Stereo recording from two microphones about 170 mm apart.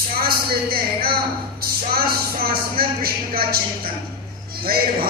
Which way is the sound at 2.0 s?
60° right (ahead or behind).